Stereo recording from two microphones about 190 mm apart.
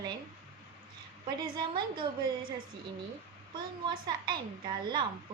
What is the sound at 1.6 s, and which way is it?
Speech, 25° right (ahead or behind).